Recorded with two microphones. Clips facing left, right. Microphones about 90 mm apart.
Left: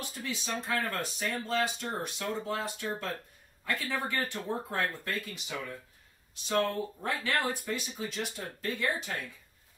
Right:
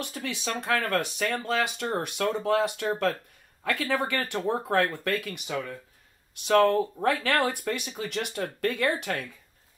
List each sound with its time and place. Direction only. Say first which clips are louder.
0.0 s speech: right 5 dB; 70° right (ahead or behind)